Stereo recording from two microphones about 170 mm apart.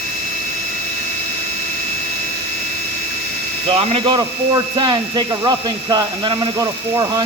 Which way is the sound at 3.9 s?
35° right (ahead or behind).